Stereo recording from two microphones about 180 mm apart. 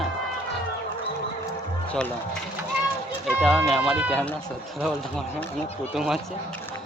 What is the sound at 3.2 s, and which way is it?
Speech, centre (ahead or behind).